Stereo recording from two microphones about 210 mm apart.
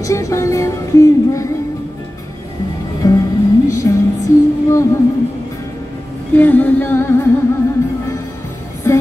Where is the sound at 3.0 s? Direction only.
15° left (ahead or behind).